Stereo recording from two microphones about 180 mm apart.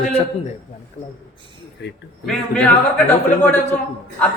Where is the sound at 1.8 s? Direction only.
70° left (ahead or behind).